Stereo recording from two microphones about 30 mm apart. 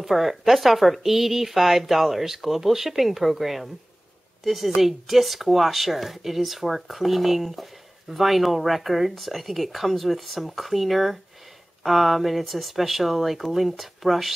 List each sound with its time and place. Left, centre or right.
0.0 s a woman's voice: centre